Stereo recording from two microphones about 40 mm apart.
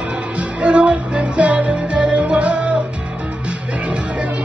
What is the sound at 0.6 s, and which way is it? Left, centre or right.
Music, right.